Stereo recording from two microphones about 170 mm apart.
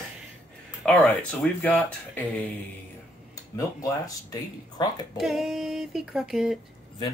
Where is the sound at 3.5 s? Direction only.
20° left (ahead or behind).